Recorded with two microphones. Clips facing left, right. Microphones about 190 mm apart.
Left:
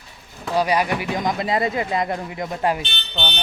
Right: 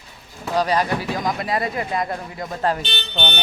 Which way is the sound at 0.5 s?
10° left (ahead or behind).